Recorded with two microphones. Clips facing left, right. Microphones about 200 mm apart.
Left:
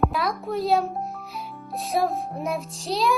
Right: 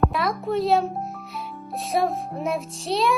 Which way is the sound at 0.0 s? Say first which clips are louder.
Right 1 dB; centre (ahead or behind).